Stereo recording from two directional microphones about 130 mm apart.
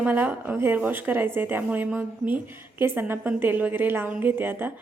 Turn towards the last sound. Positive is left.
turn(degrees=-15)  # may be behind; listen again after turning